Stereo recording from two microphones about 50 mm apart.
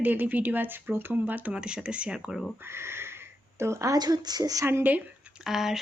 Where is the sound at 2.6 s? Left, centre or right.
Right.